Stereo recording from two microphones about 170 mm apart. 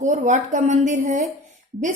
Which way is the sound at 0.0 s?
45° right (ahead or behind).